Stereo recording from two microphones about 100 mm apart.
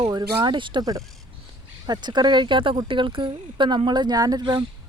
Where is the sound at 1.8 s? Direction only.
45° right (ahead or behind).